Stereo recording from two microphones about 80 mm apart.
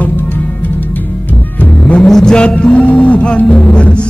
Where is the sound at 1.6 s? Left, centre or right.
Centre.